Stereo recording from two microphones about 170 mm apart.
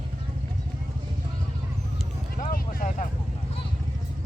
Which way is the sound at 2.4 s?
55° left (ahead or behind).